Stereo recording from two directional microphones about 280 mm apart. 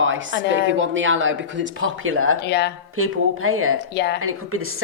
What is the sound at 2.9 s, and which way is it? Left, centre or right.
Speech, right.